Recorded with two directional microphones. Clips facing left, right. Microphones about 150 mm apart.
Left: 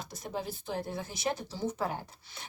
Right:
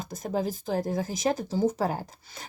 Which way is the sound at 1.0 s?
90° right.